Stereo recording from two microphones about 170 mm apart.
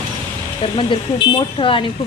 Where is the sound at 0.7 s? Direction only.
30° left (ahead or behind).